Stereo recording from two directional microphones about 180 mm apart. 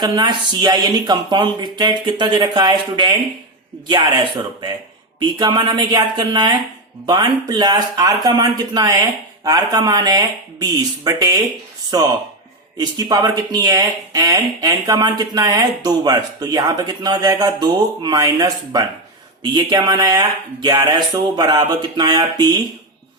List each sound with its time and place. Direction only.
0.0 s speech: 25° right (ahead or behind)